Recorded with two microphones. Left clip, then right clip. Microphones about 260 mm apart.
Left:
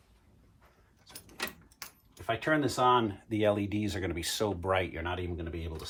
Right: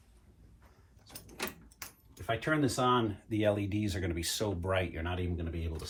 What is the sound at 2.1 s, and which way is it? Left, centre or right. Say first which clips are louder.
Speech: left 2 dB; left.